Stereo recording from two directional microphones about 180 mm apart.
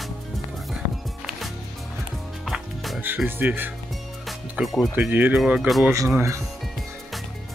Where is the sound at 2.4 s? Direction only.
Centre (ahead or behind).